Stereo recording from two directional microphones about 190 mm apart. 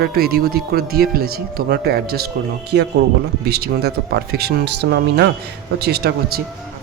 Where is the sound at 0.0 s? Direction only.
55° right (ahead or behind).